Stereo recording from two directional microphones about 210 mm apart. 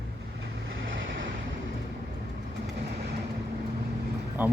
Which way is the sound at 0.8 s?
65° right (ahead or behind).